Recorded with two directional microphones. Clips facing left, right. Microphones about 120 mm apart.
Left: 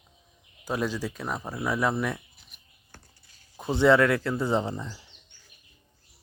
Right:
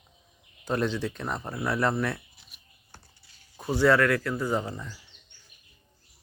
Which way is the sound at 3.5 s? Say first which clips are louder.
Left 2 dB; 20° left (ahead or behind).